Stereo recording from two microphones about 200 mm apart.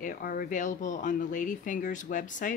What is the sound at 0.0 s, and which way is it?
Speech, 40° left (ahead or behind).